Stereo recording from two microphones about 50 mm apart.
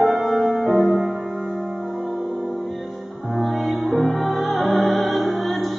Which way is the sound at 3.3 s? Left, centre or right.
Centre.